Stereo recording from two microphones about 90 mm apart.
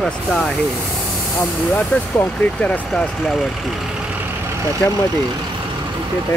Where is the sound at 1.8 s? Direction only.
20° left (ahead or behind).